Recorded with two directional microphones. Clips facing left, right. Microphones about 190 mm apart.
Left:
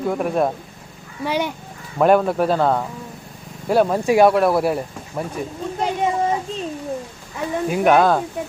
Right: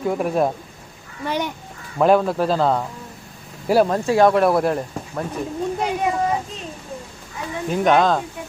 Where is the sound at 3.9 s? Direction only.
10° left (ahead or behind).